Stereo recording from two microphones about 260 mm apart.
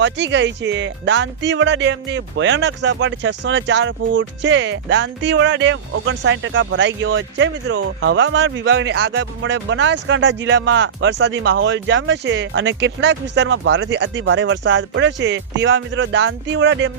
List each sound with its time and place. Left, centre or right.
0.0 s speech: right